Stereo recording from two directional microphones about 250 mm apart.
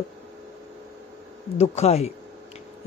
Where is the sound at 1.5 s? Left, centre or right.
Left.